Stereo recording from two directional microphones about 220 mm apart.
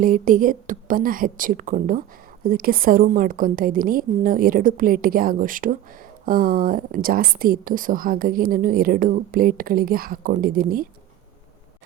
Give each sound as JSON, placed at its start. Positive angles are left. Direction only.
{"t": 0.0, "sound": "a woman's voice", "side_deg": -40}